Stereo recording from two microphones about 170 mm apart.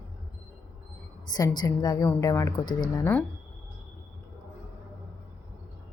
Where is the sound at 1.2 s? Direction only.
25° left (ahead or behind).